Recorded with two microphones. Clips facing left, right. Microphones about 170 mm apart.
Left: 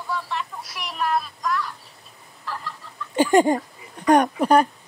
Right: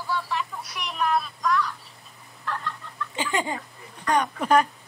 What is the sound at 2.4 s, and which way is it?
Chicken, 5° left (ahead or behind).